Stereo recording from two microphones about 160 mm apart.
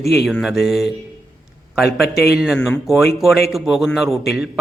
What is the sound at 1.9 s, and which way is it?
Speech, 90° left.